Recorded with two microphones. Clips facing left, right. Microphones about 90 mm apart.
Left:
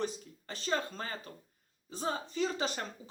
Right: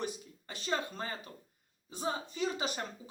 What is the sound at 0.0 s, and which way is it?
Speech, 15° right (ahead or behind).